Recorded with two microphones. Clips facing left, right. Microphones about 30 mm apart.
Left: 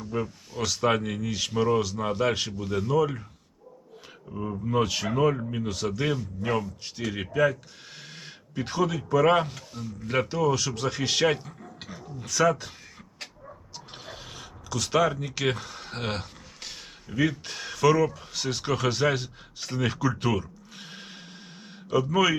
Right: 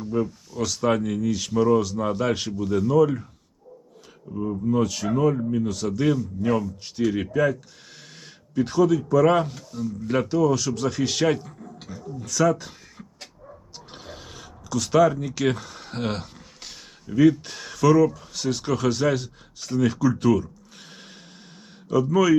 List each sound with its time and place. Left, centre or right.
0.1 s speech: left
2.5 s speech: centre
4.3 s speech: left
13.9 s mechanisms: centre
15.4 s a sound: centre
17.1 s speech: centre